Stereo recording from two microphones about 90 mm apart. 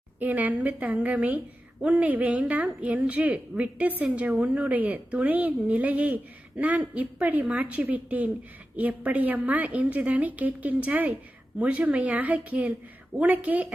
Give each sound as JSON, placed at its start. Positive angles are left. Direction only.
{"t": 0.2, "sound": "a woman's voice", "side_deg": -20}